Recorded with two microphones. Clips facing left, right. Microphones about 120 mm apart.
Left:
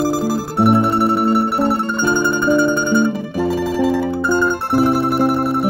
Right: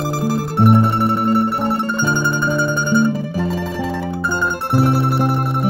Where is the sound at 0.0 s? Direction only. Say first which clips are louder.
Left 2 dB; centre (ahead or behind).